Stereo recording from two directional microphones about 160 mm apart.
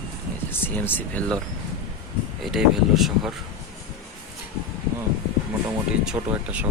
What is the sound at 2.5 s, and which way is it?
Speech, 5° right (ahead or behind).